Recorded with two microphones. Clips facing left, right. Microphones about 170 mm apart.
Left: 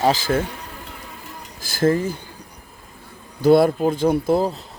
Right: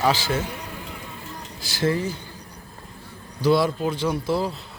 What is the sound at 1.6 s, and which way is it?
Speech, 50° left (ahead or behind).